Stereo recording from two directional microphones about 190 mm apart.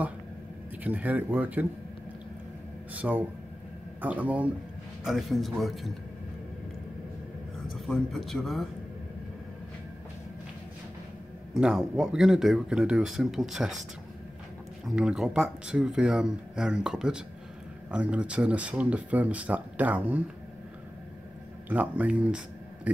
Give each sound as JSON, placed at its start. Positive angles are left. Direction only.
{"t": 0.8, "sound": "speech", "side_deg": -10}
{"t": 2.9, "sound": "speech", "side_deg": -10}
{"t": 7.7, "sound": "speech", "side_deg": 0}
{"t": 11.5, "sound": "speech", "side_deg": -5}
{"t": 14.9, "sound": "speech", "side_deg": -5}
{"t": 21.6, "sound": "speech", "side_deg": -10}